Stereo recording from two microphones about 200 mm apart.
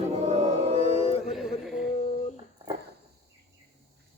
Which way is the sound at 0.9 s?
30° left (ahead or behind).